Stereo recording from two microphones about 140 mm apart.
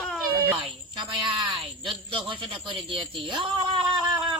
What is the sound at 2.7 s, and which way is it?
Speech, 40° right (ahead or behind).